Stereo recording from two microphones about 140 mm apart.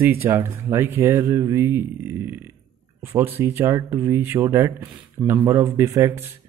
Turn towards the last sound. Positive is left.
turn(degrees=-20)  # may be behind; listen again after turning